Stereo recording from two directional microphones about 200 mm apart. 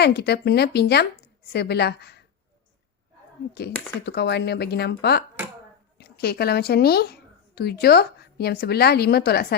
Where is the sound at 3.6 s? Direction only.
55° left (ahead or behind).